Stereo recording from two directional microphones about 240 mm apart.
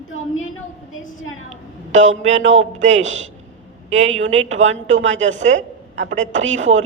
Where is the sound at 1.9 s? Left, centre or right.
Right.